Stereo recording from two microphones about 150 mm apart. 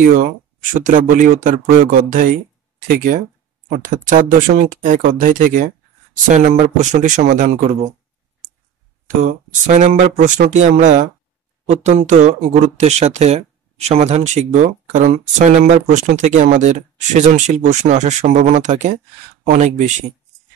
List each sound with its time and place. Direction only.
0.7 s speech: 60° right (ahead or behind)
9.2 s speech: 60° right (ahead or behind)